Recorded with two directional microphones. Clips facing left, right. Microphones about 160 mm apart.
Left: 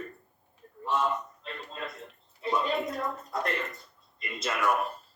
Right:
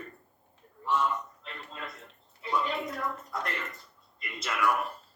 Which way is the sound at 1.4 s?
25° left (ahead or behind).